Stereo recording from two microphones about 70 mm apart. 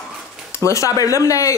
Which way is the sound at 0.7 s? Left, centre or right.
Left.